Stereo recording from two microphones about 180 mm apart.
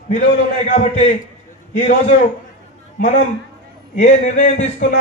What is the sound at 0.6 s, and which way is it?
A man's voice, 40° left (ahead or behind).